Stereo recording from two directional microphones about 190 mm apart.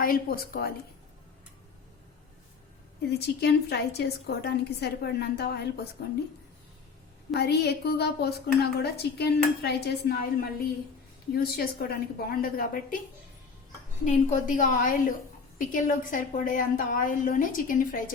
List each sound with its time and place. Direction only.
0.0 s a woman's voice: 50° left (ahead or behind)
3.1 s a woman's voice: 60° left (ahead or behind)
7.3 s a woman's voice: 60° left (ahead or behind)
14.0 s a woman's voice: 40° left (ahead or behind)